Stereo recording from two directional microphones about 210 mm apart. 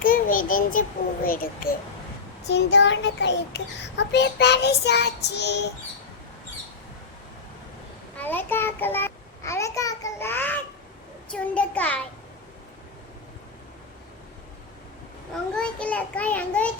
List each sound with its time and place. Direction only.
0.0 s a child's voice: 40° left (ahead or behind)
2.5 s a child's voice: 55° left (ahead or behind)
8.1 s a child's voice: 10° left (ahead or behind)
15.5 s a child's voice: 5° left (ahead or behind)